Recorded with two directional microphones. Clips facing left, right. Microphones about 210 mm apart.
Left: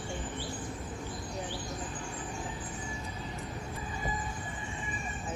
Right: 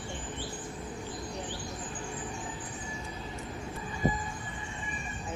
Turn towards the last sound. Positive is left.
turn(degrees=-20)  # may be behind; listen again after turning